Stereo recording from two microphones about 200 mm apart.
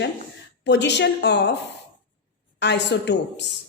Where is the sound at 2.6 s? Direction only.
60° left (ahead or behind).